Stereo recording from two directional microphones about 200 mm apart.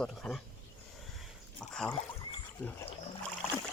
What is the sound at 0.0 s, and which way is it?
Speech, centre (ahead or behind).